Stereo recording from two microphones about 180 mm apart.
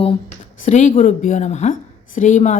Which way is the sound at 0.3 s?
40° left (ahead or behind).